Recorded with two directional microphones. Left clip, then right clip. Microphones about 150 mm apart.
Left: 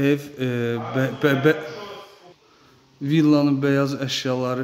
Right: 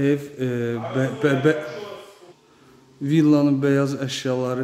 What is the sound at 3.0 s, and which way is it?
A man's voice, centre (ahead or behind).